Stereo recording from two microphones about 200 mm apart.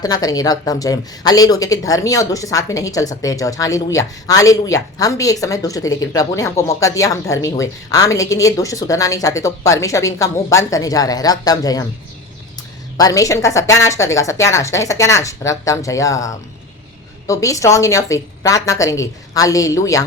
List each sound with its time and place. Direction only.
0.0 s a woman's voice: 20° left (ahead or behind)